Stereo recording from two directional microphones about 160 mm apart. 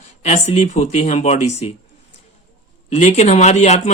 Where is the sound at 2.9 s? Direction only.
45° left (ahead or behind).